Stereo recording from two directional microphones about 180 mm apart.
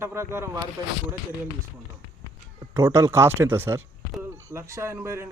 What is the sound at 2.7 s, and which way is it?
A man's voice, 15° right (ahead or behind).